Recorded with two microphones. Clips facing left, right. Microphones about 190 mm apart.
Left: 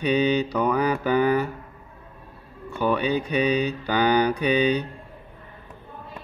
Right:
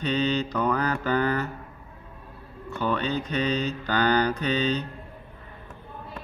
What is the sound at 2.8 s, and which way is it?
Mantra, 10° left (ahead or behind).